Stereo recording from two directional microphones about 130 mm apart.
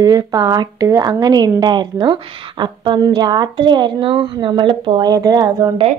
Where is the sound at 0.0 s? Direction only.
30° right (ahead or behind).